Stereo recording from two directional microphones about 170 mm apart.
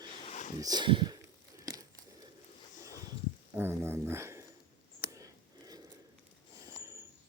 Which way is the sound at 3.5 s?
15° right (ahead or behind).